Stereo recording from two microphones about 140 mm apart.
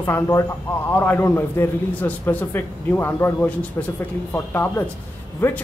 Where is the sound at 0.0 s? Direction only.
20° left (ahead or behind).